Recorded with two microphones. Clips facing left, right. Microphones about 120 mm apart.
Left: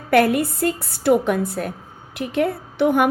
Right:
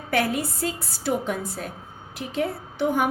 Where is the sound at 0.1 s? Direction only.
60° left (ahead or behind).